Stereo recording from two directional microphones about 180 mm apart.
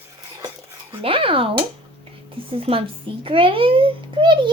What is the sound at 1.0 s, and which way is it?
A woman's voice, 30° right (ahead or behind).